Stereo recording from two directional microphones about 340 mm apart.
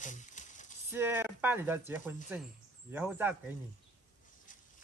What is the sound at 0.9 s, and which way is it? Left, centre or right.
Speech, centre.